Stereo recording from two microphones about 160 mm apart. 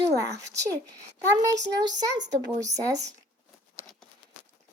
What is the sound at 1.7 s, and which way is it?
Speech, 25° right (ahead or behind).